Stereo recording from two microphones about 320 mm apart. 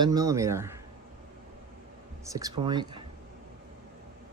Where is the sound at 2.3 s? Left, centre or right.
Centre.